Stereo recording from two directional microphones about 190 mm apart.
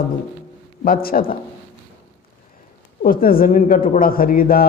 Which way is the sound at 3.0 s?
50° left (ahead or behind).